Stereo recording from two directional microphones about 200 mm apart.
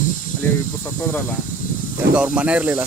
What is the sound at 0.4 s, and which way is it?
Speech, 10° left (ahead or behind).